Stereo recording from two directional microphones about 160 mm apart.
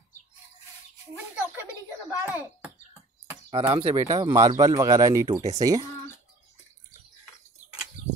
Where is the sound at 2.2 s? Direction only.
15° right (ahead or behind).